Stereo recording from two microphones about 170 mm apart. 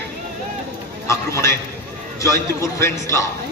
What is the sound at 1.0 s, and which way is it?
A man's voice, 15° left (ahead or behind).